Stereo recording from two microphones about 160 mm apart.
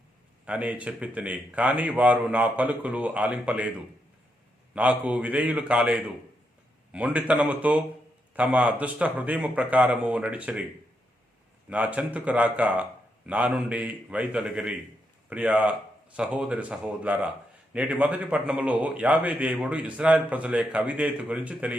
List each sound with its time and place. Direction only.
0.4 s a man's voice: 10° right (ahead or behind)
11.7 s a man's voice: 10° right (ahead or behind)